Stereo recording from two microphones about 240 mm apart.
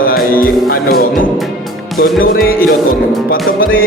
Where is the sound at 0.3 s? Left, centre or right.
Left.